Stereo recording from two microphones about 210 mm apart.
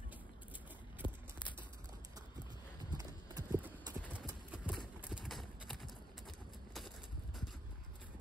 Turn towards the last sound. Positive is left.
turn(degrees=0)  # may be behind; listen again after turning